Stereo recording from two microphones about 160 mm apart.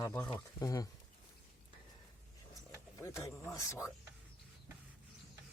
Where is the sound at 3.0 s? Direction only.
20° left (ahead or behind).